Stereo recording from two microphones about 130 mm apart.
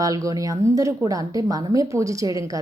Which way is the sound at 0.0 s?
25° right (ahead or behind).